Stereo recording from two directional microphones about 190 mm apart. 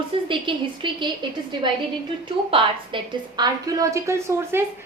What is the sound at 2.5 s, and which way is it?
A woman's voice, 25° right (ahead or behind).